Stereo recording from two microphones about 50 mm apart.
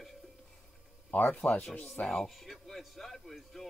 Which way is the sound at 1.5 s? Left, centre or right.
Left.